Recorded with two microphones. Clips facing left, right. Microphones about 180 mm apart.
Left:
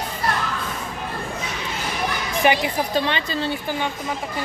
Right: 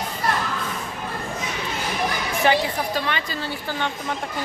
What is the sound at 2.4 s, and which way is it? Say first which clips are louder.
A woman's voice: left 1 dB; 15° left (ahead or behind).